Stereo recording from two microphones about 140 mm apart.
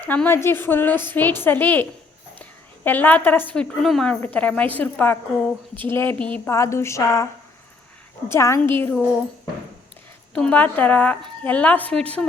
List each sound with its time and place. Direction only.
0.1 s a woman's voice: 15° left (ahead or behind)
6.5 s speech: 20° left (ahead or behind)
8.3 s a woman's voice: 20° left (ahead or behind)
10.3 s a woman's voice: 10° left (ahead or behind)